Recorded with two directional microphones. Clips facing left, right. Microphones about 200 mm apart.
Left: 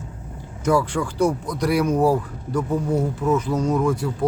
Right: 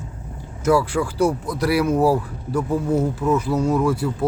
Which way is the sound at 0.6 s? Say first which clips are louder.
Right 2 dB; 5° right (ahead or behind).